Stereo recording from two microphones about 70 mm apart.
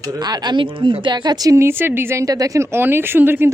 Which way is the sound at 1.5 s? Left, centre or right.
Right.